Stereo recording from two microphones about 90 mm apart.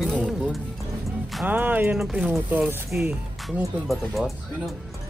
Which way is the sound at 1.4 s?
20° right (ahead or behind).